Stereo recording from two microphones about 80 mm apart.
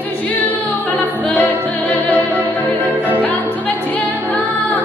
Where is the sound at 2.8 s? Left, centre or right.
Right.